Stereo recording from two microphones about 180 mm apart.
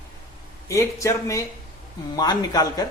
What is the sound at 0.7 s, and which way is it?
Speech, 15° left (ahead or behind).